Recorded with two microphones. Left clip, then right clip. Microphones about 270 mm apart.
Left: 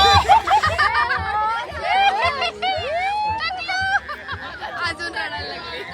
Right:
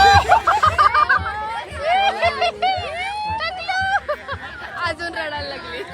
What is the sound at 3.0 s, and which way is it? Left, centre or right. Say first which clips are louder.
Vehicle: left 3 dB; left.